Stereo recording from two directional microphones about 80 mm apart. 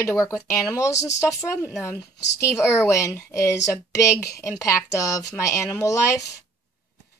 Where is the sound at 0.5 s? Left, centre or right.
Left.